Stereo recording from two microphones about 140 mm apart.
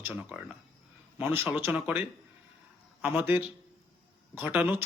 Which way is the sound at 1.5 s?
10° right (ahead or behind).